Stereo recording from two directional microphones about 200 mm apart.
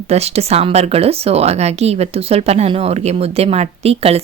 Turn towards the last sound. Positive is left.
turn(degrees=-30)  # may be behind; listen again after turning